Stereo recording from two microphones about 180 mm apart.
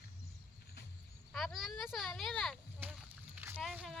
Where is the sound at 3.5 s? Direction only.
Centre (ahead or behind).